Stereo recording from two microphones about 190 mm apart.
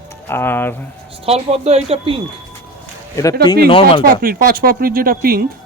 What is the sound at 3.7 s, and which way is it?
Speech, 30° left (ahead or behind).